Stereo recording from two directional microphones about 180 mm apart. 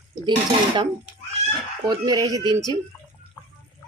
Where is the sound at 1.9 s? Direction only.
20° right (ahead or behind).